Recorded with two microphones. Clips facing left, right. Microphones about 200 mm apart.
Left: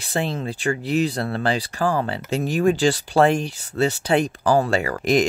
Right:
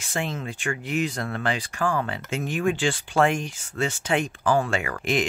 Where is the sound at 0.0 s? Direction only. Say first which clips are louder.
Left 5 dB; 35° left (ahead or behind).